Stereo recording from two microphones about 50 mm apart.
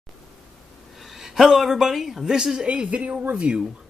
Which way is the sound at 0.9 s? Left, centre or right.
Centre.